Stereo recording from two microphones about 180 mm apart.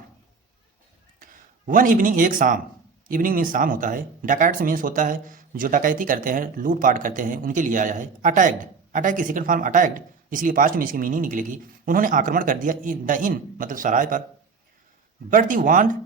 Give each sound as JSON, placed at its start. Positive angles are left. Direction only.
{"t": 1.2, "sound": "speech", "side_deg": -50}
{"t": 15.3, "sound": "speech", "side_deg": -50}